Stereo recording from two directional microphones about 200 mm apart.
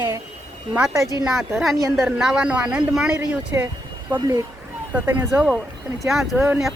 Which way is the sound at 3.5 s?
15° right (ahead or behind).